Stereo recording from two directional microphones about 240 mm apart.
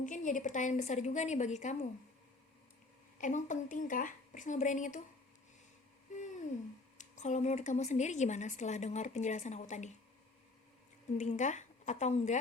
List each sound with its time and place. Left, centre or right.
0.0 s speech: left
3.2 s a woman's voice: left
7.0 s speech: left
11.2 s speech: left